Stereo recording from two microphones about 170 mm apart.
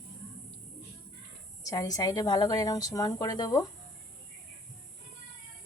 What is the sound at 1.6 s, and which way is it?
A woman's voice, 20° left (ahead or behind).